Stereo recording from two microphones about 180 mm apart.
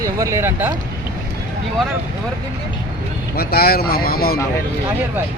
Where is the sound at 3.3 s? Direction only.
60° left (ahead or behind).